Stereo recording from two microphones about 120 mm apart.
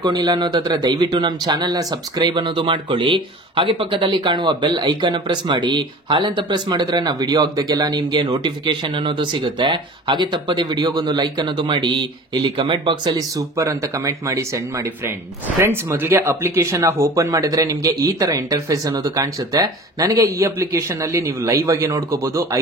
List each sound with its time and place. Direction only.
0.0 s speech: 35° right (ahead or behind)
13.4 s speech: 25° right (ahead or behind)